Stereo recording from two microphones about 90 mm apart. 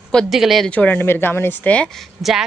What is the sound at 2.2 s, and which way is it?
Speech, 5° right (ahead or behind).